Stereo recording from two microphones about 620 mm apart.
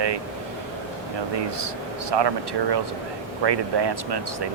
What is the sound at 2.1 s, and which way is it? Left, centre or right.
Speech, right.